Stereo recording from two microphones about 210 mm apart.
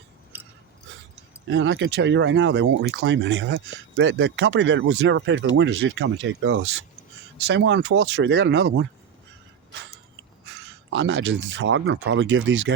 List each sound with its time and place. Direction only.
1.5 s speech: 60° right (ahead or behind)
10.4 s speech: 55° right (ahead or behind)